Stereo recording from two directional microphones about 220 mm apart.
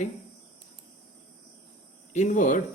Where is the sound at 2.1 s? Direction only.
35° left (ahead or behind).